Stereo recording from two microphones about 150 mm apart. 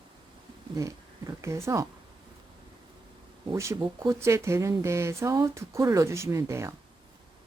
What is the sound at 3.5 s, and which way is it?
Speech, 20° right (ahead or behind).